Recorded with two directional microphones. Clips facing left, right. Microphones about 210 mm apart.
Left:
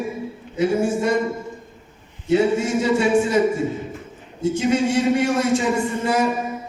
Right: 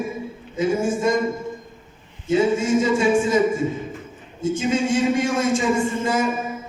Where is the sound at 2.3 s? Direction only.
65° left (ahead or behind).